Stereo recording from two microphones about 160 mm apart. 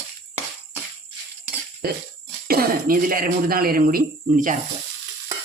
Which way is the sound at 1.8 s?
70° right (ahead or behind).